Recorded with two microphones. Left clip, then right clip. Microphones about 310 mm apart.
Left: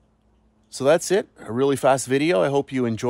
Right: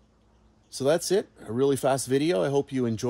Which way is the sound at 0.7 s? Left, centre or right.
Centre.